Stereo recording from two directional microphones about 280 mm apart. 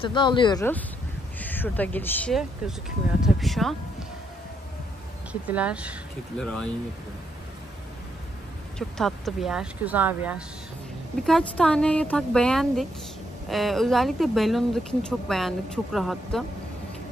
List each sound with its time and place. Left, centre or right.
0.0 s speech: centre
5.3 s speech: centre
8.7 s speech: centre